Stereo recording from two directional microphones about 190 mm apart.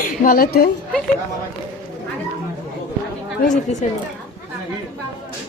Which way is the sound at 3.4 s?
40° left (ahead or behind).